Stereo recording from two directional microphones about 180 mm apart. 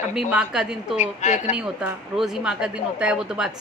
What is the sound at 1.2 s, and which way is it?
Speech, 40° left (ahead or behind).